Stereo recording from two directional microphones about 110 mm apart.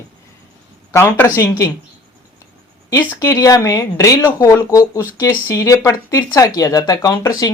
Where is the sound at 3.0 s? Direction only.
25° left (ahead or behind).